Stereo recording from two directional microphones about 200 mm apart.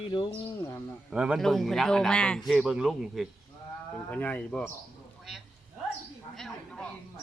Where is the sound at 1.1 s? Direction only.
5° right (ahead or behind).